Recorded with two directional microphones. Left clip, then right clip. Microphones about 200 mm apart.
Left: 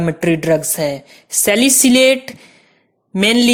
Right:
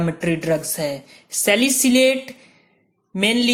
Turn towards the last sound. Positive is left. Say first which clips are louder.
# left 5 dB
turn(degrees=45)  # may be behind; listen again after turning